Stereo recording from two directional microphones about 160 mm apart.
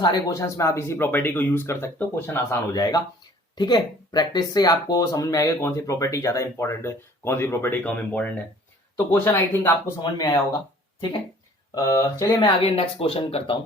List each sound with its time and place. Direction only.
0.0 s speech: 25° left (ahead or behind)
2.7 s speech: 25° left (ahead or behind)
10.0 s speech: 25° left (ahead or behind)
11.7 s speech: 25° left (ahead or behind)
12.5 s speech: 35° left (ahead or behind)